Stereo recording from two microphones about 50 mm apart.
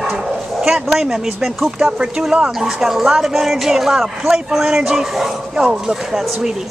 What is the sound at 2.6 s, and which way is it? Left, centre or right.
Speech, centre.